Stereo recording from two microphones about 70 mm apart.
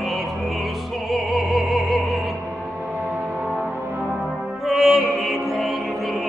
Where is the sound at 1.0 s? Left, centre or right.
Centre.